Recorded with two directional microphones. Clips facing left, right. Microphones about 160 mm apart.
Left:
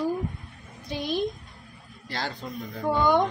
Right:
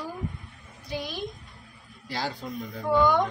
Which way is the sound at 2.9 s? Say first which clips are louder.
Even; 20° left (ahead or behind).